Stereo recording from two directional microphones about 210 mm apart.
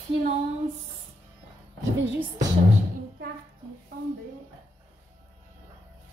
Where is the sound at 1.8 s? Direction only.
10° right (ahead or behind).